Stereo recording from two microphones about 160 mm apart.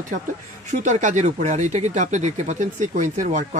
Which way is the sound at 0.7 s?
50° right (ahead or behind).